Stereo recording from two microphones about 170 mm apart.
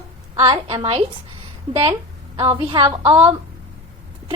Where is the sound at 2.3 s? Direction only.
30° right (ahead or behind).